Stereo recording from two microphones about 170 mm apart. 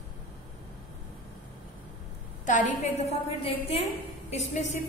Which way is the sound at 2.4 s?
45° left (ahead or behind).